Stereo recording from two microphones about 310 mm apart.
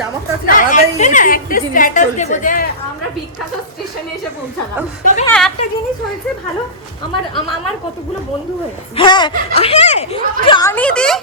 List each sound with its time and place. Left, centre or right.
0.4 s a woman's voice: left
5.2 s speech: centre
9.0 s speech: centre